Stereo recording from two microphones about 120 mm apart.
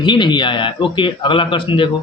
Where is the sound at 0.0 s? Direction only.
40° left (ahead or behind).